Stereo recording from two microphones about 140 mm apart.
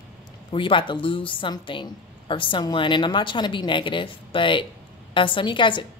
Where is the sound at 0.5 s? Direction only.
35° left (ahead or behind).